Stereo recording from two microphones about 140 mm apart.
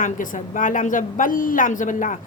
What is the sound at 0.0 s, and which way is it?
Speech, 70° left (ahead or behind).